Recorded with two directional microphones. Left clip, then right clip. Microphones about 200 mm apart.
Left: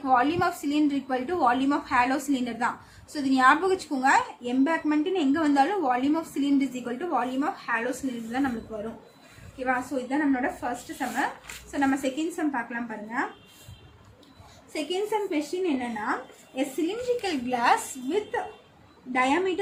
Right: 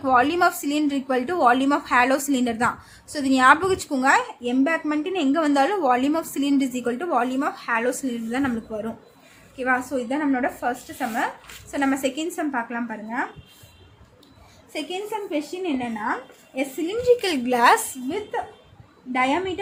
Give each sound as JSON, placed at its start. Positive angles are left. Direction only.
{"t": 0.0, "sound": "a woman's voice", "side_deg": -50}
{"t": 9.6, "sound": "a woman's voice", "side_deg": -50}
{"t": 11.7, "sound": "a woman's voice", "side_deg": -50}
{"t": 14.7, "sound": "a woman's voice", "side_deg": -30}
{"t": 19.1, "sound": "a woman's voice", "side_deg": -30}